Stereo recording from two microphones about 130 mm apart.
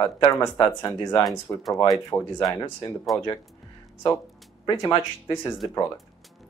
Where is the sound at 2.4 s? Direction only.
25° left (ahead or behind).